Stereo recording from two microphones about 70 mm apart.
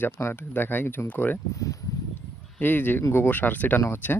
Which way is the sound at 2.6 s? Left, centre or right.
Left.